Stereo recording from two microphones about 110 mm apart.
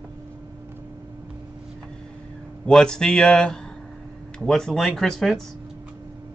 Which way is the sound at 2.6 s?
5° left (ahead or behind).